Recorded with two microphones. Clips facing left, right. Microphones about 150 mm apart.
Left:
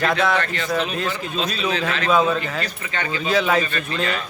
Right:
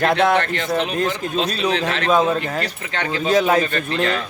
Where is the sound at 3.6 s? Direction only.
70° right (ahead or behind).